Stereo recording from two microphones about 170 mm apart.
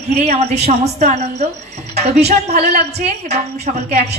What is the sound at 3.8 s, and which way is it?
Speech, 45° right (ahead or behind).